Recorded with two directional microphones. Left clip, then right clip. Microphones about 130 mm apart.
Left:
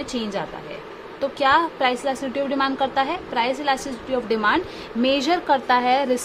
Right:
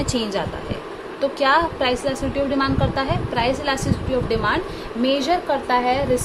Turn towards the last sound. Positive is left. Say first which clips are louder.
# left 1 dB
turn(degrees=90)